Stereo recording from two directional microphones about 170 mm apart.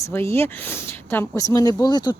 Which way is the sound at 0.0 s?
15° left (ahead or behind).